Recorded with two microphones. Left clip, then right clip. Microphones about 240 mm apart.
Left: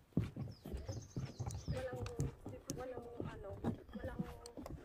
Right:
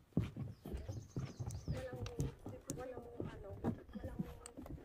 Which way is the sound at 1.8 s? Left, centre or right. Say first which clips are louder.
Left 4 dB; left.